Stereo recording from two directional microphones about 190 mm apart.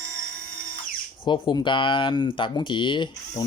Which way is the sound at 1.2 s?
25° left (ahead or behind).